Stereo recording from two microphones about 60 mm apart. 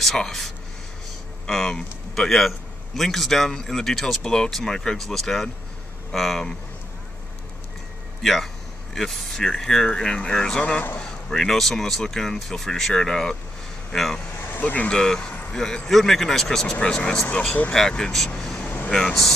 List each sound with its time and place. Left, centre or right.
0.0 s speech: centre
1.5 s speech: centre
8.2 s a man's voice: centre
14.6 s speech: left
14.9 s speech: centre
18.4 s vehicle: centre
18.9 s speech: centre